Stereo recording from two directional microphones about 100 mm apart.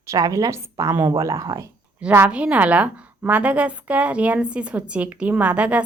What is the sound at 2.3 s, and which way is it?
A woman's voice, 15° right (ahead or behind).